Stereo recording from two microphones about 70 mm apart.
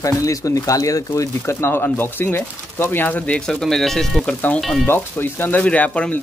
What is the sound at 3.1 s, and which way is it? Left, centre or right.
Speech, centre.